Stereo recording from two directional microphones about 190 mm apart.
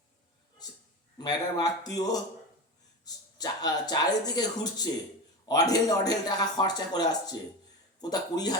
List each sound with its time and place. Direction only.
1.2 s speech: 20° left (ahead or behind)